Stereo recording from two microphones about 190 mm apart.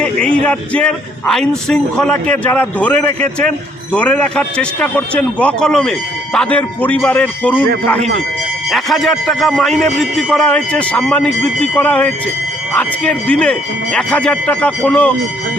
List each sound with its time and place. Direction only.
0.0 s a man's voice: 5° left (ahead or behind)
8.7 s speech: centre (ahead or behind)